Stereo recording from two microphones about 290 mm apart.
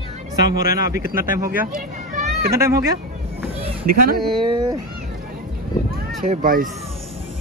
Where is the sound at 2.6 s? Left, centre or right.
Centre.